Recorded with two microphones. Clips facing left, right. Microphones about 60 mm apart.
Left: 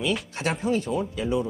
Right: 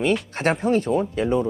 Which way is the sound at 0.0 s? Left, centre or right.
Right.